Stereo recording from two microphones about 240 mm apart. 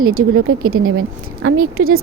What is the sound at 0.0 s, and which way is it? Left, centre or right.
Speech, right.